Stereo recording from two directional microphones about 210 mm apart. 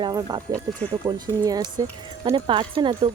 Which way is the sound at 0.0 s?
15° right (ahead or behind).